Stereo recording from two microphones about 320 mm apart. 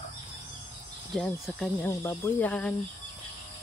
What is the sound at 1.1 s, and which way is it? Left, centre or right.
Speech, centre.